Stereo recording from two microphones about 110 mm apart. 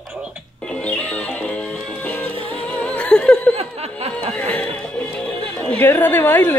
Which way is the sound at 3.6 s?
70° right (ahead or behind).